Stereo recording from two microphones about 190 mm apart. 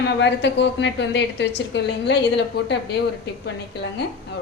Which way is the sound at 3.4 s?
60° left (ahead or behind).